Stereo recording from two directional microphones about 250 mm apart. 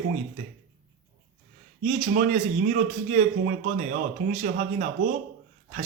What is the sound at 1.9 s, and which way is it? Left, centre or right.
A man's voice, right.